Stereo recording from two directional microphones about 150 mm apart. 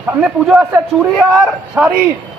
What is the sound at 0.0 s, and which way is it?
Speech, 5° right (ahead or behind).